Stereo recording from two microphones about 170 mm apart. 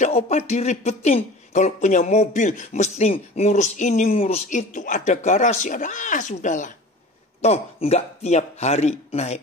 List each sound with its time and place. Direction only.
0.0 s speech: 40° left (ahead or behind)